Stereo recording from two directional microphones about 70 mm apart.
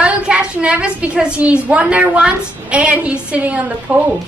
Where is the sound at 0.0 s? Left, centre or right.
Centre.